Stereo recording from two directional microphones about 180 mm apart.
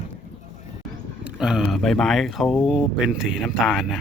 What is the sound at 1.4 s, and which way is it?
Speech, centre (ahead or behind).